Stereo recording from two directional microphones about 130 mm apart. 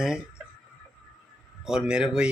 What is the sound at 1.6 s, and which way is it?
Speech, 5° right (ahead or behind).